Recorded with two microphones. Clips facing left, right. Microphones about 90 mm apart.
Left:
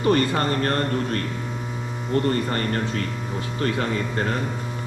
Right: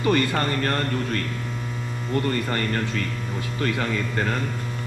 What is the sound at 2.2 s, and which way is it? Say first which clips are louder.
Speech: left 2 dB; 30° left (ahead or behind).